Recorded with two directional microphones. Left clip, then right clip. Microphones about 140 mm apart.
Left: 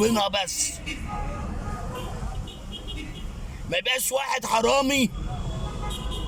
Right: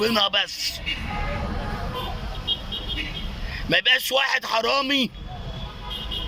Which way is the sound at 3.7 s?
25° left (ahead or behind).